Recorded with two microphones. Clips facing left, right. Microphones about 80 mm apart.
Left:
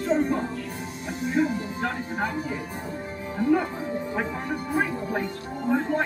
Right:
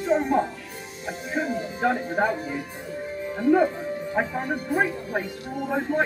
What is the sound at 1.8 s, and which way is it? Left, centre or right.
Speech, centre.